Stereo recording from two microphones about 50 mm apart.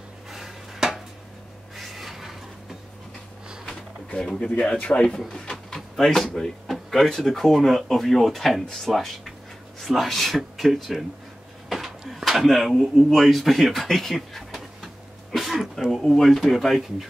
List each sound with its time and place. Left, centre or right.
0.3 s a sound: centre
4.1 s speech: centre
5.5 s speech: centre